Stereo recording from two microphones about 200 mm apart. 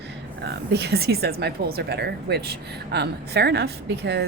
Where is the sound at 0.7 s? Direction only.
55° right (ahead or behind).